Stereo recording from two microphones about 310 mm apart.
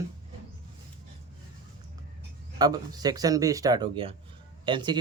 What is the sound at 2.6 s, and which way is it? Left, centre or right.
Speech, centre.